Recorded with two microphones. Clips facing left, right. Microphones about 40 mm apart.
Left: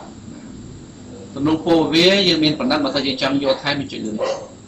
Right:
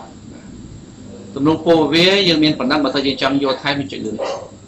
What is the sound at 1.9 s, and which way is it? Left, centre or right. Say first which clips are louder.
A man's voice: right 1 dB; right.